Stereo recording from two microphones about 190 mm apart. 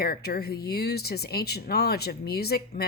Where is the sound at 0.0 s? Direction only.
55° left (ahead or behind).